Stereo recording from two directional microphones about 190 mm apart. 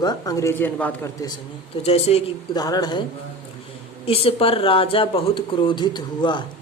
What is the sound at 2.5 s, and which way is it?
Speech, 20° left (ahead or behind).